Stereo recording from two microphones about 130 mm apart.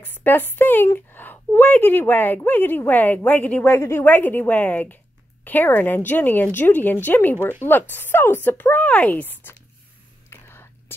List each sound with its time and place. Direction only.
0.0 s speech: 15° left (ahead or behind)
10.3 s whispering: 15° left (ahead or behind)